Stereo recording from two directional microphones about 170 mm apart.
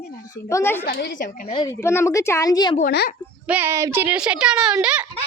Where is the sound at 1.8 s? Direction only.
15° left (ahead or behind).